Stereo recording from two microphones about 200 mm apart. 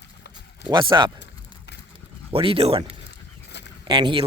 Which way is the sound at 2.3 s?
30° right (ahead or behind).